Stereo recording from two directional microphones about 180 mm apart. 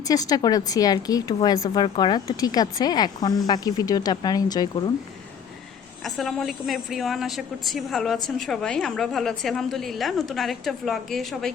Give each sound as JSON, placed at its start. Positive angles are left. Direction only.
{"t": 0.0, "sound": "a woman's voice", "side_deg": 20}
{"t": 6.0, "sound": "a woman's voice", "side_deg": 0}